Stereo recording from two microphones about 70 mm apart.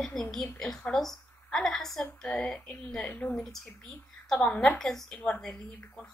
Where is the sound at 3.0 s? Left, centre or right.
Left.